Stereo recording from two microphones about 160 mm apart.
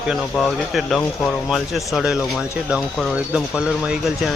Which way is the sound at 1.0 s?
10° left (ahead or behind).